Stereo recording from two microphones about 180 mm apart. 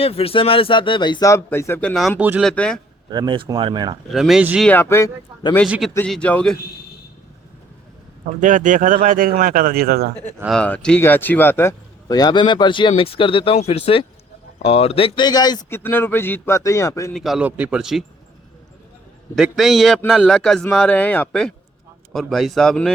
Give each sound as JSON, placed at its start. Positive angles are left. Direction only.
{"t": 0.0, "sound": "speech", "side_deg": 30}
{"t": 2.4, "sound": "speech", "side_deg": 5}
{"t": 3.1, "sound": "speech", "side_deg": -25}
{"t": 4.1, "sound": "speech", "side_deg": 0}
{"t": 4.7, "sound": "speech", "side_deg": 15}
{"t": 5.6, "sound": "speech", "side_deg": -5}
{"t": 6.1, "sound": "speech", "side_deg": 5}
{"t": 8.4, "sound": "speech", "side_deg": -45}
{"t": 10.4, "sound": "speech", "side_deg": 5}
{"t": 15.8, "sound": "speech", "side_deg": 10}
{"t": 17.2, "sound": "speech", "side_deg": 0}
{"t": 19.4, "sound": "speech", "side_deg": 0}